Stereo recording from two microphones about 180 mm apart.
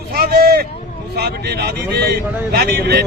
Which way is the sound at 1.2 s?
60° right (ahead or behind).